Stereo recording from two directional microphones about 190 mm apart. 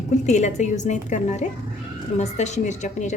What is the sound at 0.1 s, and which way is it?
A woman's voice, 40° left (ahead or behind).